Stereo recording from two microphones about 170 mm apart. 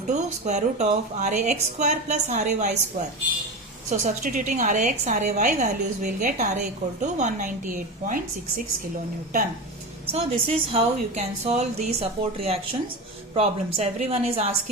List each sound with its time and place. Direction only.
0.1 s a woman's voice: 45° right (ahead or behind)
3.8 s a woman's voice: 45° right (ahead or behind)
10.1 s a woman's voice: 35° right (ahead or behind)
13.3 s a woman's voice: 35° right (ahead or behind)